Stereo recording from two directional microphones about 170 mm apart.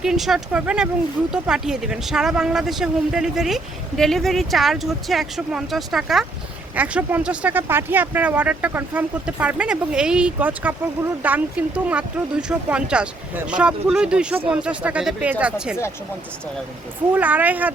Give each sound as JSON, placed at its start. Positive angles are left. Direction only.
{"t": 0.0, "sound": "speech", "side_deg": 0}
{"t": 17.2, "sound": "speech", "side_deg": -10}